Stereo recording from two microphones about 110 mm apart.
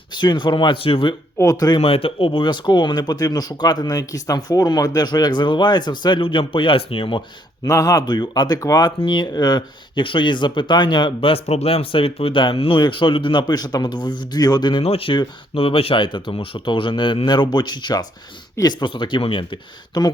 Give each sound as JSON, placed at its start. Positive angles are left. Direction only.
{"t": 0.1, "sound": "speech", "side_deg": 45}
{"t": 1.4, "sound": "speech", "side_deg": 35}
{"t": 1.8, "sound": "speech", "side_deg": 60}
{"t": 7.6, "sound": "speech", "side_deg": 30}
{"t": 9.0, "sound": "speech", "side_deg": 45}
{"t": 14.8, "sound": "speech", "side_deg": 60}
{"t": 18.9, "sound": "speech", "side_deg": 45}